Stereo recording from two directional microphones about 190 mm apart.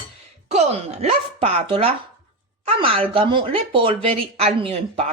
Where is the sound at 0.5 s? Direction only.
35° right (ahead or behind).